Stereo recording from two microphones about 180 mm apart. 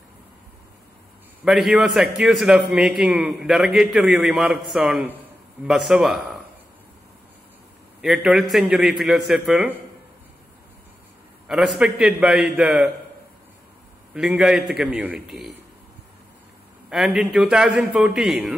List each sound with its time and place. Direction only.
1.4 s a man's voice: centre (ahead or behind)
8.0 s a man's voice: 5° right (ahead or behind)
11.4 s a man's voice: centre (ahead or behind)
14.1 s a man's voice: 5° right (ahead or behind)
16.9 s a man's voice: centre (ahead or behind)